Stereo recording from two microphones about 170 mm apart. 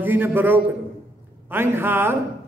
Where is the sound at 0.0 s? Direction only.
10° right (ahead or behind).